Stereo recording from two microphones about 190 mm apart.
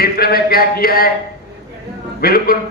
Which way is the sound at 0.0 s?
55° left (ahead or behind).